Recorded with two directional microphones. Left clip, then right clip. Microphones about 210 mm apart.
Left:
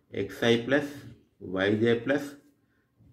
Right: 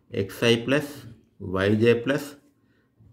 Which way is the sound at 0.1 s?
50° right (ahead or behind).